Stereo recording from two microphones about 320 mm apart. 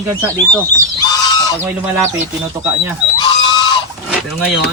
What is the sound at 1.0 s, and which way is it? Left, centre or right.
Goose, centre.